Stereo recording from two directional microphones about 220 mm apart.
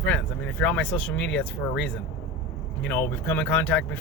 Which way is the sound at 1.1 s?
55° left (ahead or behind).